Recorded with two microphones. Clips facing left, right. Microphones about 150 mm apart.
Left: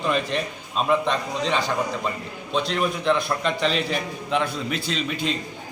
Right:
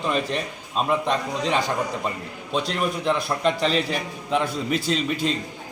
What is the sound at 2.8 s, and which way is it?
Speech, 5° right (ahead or behind).